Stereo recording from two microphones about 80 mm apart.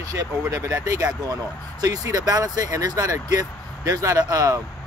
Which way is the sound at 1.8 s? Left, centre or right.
Right.